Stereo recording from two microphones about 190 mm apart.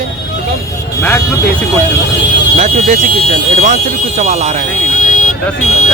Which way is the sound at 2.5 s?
40° right (ahead or behind).